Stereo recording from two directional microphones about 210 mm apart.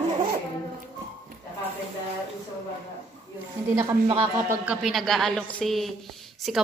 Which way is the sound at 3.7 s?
15° right (ahead or behind).